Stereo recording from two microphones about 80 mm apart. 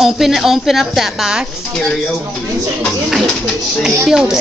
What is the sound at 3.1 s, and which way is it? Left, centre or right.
A woman's voice, centre.